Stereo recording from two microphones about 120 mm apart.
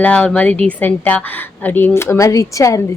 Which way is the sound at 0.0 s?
10° left (ahead or behind).